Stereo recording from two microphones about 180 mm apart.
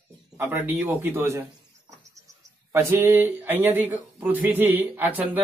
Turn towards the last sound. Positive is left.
turn(degrees=-10)  # may be behind; listen again after turning